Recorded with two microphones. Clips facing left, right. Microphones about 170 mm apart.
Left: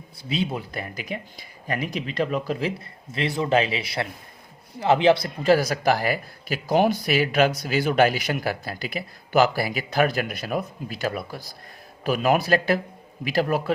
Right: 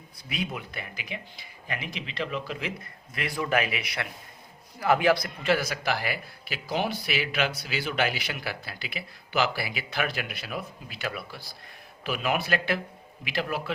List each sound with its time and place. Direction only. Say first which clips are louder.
0.2 s speech: left 7 dB; 30° left (ahead or behind)
0.7 s a man's voice: left 7 dB; 40° left (ahead or behind)